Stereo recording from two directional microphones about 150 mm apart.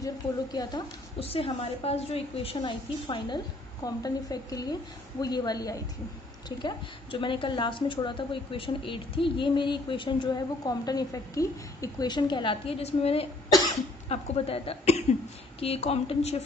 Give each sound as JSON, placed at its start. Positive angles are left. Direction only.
{"t": 0.0, "sound": "a woman's voice", "side_deg": 25}
{"t": 1.2, "sound": "a woman's voice", "side_deg": 40}